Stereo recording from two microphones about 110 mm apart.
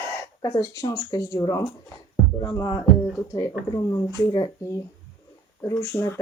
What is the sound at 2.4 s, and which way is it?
Heart sounds, 30° left (ahead or behind).